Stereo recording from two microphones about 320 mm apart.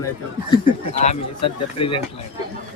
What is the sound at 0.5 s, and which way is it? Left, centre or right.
A man's voice, centre.